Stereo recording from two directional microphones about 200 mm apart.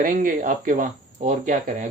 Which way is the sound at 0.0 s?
40° right (ahead or behind).